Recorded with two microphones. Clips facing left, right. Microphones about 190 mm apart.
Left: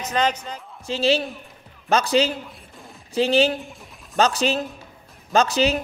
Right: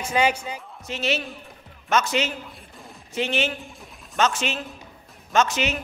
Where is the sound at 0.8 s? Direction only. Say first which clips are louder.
Left 6 dB; 30° left (ahead or behind).